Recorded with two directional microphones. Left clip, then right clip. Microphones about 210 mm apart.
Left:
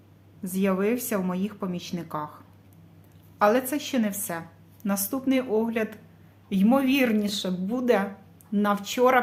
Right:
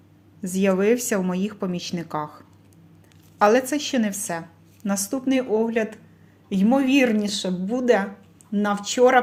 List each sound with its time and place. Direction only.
0.4 s a woman's voice: 15° right (ahead or behind)